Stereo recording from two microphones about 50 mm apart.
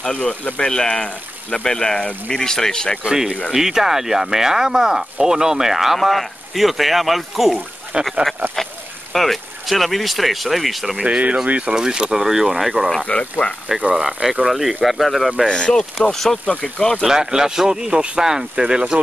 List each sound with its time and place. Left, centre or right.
0.0 s speech: left
0.7 s speech: centre
3.0 s speech: centre
7.9 s speech: centre
9.1 s speech: centre
11.1 s speech: right
11.7 s speech: centre
13.0 s speech: left
13.7 s speech: right
14.4 s speech: centre
15.4 s speech: centre
17.0 s speech: centre